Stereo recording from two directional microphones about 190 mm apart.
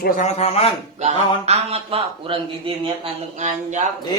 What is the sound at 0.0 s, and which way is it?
Speech, 50° left (ahead or behind).